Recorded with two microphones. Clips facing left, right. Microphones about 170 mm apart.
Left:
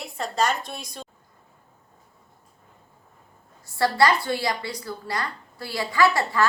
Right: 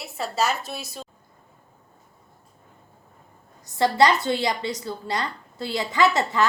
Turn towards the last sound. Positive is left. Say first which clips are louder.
# even
turn(degrees=-20)  # may be behind; listen again after turning